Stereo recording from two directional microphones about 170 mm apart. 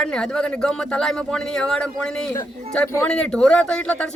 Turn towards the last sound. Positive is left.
turn(degrees=5)  # may be behind; listen again after turning